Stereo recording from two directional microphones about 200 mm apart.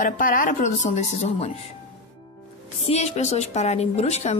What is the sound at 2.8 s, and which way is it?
Speech, 30° left (ahead or behind).